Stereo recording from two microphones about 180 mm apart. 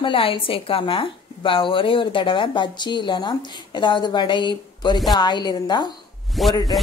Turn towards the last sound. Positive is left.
turn(degrees=0)  # may be behind; listen again after turning